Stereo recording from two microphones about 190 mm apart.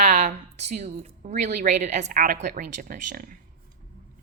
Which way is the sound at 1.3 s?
40° right (ahead or behind).